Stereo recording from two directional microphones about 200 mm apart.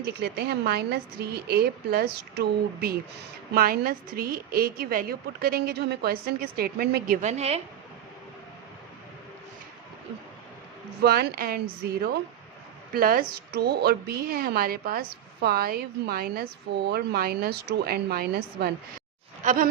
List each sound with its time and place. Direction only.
0.0 s a woman's voice: 55° right (ahead or behind); by 7.6 s 30° right (ahead or behind)
11.0 s a woman's voice: 50° right (ahead or behind)